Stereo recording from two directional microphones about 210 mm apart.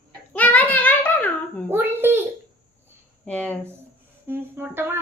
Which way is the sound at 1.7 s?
10° right (ahead or behind).